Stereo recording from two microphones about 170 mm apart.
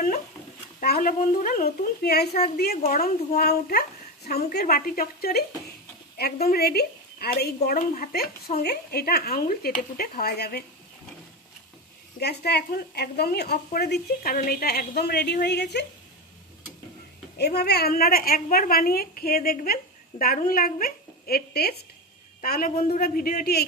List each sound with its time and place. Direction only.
0.7 s a woman's voice: 60° left (ahead or behind)
12.2 s a woman's voice: 75° left (ahead or behind)
17.4 s a woman's voice: 70° left (ahead or behind)
22.4 s a woman's voice: 55° left (ahead or behind)